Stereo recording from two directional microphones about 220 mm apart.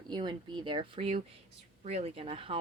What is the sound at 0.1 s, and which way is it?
Speech, 20° right (ahead or behind).